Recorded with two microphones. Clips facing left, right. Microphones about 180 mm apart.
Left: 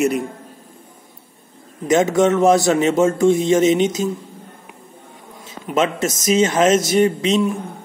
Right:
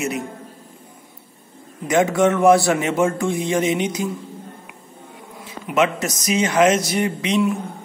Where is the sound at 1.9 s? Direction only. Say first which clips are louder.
Left 2 dB; 20° left (ahead or behind).